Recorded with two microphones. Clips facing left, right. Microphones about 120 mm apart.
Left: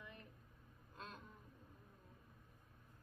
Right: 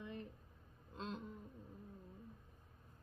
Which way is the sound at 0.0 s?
25° right (ahead or behind).